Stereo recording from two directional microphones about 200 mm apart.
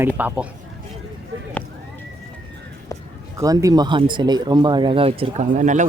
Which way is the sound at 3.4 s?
15° right (ahead or behind).